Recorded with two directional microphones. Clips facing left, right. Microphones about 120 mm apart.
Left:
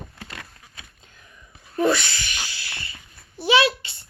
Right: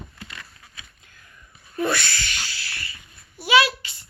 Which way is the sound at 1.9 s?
15° left (ahead or behind).